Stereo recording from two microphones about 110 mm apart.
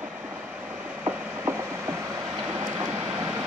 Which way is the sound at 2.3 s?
25° right (ahead or behind).